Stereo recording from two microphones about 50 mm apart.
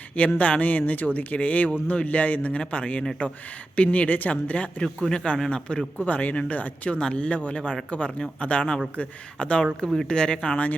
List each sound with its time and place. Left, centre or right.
0.3 s speech: left
6.0 s speech: left